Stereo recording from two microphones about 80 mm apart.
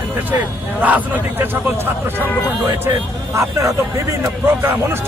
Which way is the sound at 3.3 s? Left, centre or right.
Right.